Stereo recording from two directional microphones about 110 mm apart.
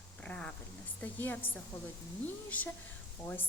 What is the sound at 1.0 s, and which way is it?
A woman's voice, 15° left (ahead or behind).